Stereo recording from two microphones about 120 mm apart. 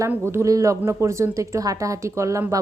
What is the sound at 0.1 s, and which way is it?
A woman's voice, 20° right (ahead or behind).